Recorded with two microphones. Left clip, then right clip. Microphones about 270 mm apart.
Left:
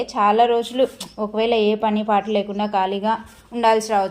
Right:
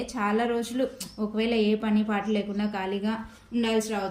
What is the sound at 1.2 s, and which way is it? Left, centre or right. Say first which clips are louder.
Speech: left 8 dB; left.